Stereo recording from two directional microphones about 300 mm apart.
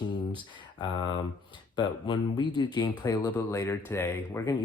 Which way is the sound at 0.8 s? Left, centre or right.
Centre.